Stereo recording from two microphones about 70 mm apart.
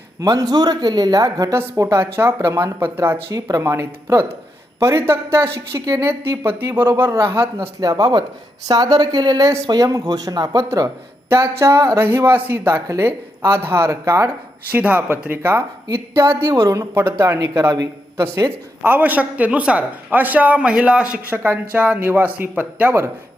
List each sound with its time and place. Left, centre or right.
0.2 s speech: right
1.5 s a woman's voice: right
3.3 s a woman's voice: right
3.6 s a woman's voice: right
7.8 s speech: right
9.6 s speech: right
11.3 s a woman's voice: right
14.7 s a woman's voice: right
18.8 s speech: right
21.2 s speech: right